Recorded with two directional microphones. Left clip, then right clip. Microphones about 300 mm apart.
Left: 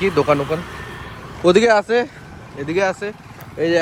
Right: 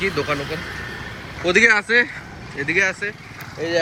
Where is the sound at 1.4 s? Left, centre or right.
Centre.